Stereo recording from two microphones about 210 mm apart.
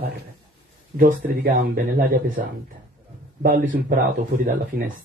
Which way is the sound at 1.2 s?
40° right (ahead or behind).